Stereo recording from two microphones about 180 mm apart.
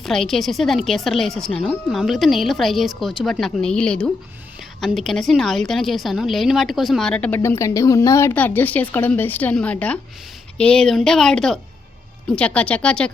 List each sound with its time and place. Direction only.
0.0 s a woman's voice: centre (ahead or behind)